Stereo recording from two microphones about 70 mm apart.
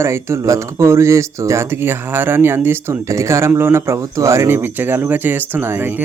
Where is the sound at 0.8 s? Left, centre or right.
Right.